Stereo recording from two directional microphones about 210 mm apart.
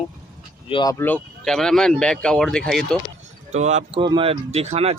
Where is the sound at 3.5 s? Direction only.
30° right (ahead or behind).